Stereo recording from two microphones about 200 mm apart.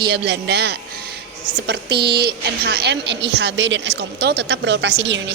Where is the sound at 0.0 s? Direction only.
55° right (ahead or behind).